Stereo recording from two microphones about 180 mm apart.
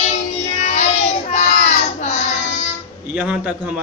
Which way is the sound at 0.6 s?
40° left (ahead or behind).